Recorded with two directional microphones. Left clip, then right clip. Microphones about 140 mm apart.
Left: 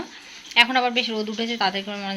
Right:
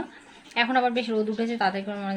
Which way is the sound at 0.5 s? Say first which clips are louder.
Left 5 dB; 15° right (ahead or behind).